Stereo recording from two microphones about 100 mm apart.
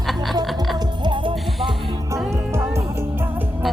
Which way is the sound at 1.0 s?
55° right (ahead or behind).